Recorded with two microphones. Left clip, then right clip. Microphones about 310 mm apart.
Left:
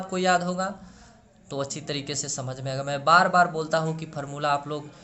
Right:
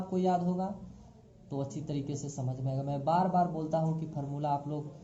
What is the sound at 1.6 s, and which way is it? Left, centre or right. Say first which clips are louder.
Speech: left 9 dB; centre.